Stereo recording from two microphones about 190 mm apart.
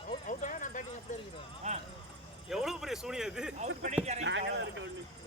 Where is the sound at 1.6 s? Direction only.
35° right (ahead or behind).